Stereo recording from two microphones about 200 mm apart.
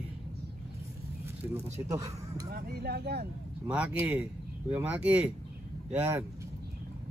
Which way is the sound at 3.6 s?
5° right (ahead or behind).